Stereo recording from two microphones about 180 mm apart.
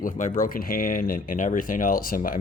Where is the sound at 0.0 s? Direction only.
50° left (ahead or behind).